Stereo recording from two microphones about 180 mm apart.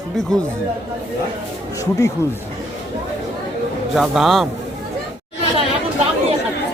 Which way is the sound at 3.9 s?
Centre (ahead or behind).